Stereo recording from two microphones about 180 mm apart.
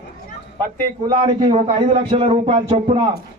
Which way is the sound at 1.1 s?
30° right (ahead or behind).